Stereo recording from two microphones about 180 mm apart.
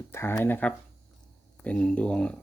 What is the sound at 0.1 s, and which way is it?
Speech, 15° left (ahead or behind).